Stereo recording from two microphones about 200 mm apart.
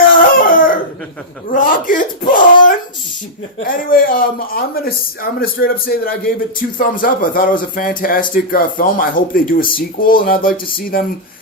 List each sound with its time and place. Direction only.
0.1 s dog: 45° left (ahead or behind)
1.5 s speech: 45° left (ahead or behind)